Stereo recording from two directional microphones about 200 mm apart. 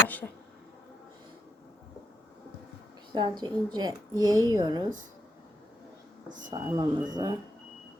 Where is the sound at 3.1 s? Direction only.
20° right (ahead or behind).